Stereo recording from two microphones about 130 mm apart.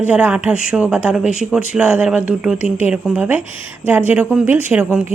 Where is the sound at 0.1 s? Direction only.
10° right (ahead or behind).